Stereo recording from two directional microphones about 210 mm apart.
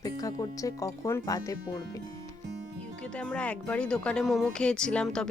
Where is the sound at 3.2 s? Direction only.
5° left (ahead or behind).